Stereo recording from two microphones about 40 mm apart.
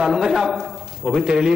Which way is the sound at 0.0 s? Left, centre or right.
Centre.